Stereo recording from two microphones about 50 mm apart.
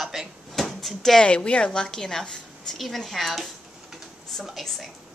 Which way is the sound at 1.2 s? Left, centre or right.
Left.